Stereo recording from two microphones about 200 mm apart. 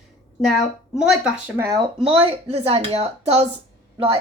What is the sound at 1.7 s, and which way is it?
A woman's voice, 25° right (ahead or behind).